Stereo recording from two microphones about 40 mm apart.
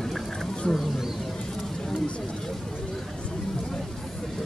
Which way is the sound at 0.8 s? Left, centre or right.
Centre.